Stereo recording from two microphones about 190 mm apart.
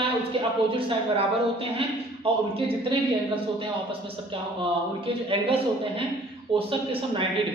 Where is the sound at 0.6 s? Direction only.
30° right (ahead or behind).